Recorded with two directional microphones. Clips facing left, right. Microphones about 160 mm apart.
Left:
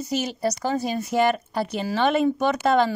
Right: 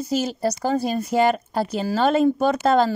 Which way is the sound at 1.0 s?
40° right (ahead or behind).